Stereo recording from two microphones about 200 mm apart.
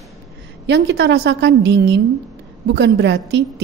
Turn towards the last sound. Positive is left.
turn(degrees=-60)  # may be behind; listen again after turning